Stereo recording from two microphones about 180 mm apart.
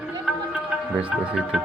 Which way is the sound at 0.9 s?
5° right (ahead or behind).